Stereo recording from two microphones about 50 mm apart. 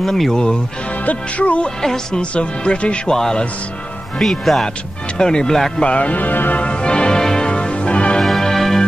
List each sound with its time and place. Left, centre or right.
0.0 s speech: centre
1.0 s speech: left
1.8 s speech: centre
2.3 s speech: left; by 4.6 s centre
5.1 s speech: centre
5.9 s music: left
6.6 s music: centre
8.2 s music: centre